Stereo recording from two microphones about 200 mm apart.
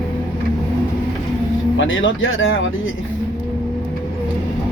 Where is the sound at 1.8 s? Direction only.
70° left (ahead or behind).